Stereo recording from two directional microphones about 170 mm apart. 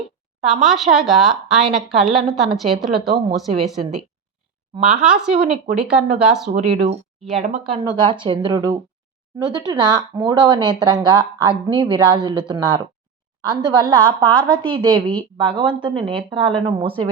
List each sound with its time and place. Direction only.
0.4 s a woman's voice: centre (ahead or behind)
4.9 s a woman's voice: 5° right (ahead or behind)
6.5 s a woman's voice: 45° right (ahead or behind)